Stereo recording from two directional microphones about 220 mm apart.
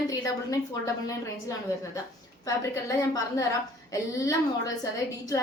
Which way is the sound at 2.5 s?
15° left (ahead or behind).